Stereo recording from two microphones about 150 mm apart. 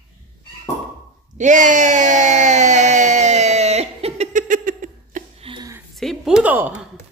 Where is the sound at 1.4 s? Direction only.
55° right (ahead or behind).